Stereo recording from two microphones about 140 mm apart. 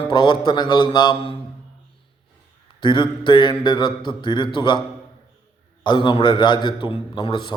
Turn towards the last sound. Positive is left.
turn(degrees=35)  # may be behind; listen again after turning